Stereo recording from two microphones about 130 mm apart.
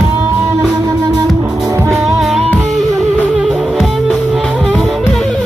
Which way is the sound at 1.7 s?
20° right (ahead or behind).